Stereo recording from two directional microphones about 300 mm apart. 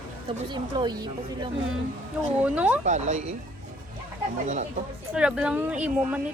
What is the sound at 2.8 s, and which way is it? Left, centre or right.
Speech, right.